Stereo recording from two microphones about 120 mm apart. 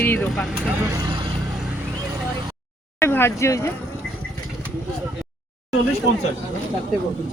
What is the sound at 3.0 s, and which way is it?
Speech, 20° left (ahead or behind).